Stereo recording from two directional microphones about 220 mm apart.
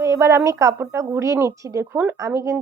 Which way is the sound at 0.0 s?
15° right (ahead or behind).